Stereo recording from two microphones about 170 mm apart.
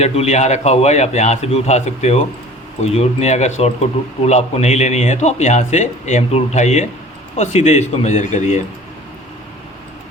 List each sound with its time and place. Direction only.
0.0 s a man's voice: 40° left (ahead or behind)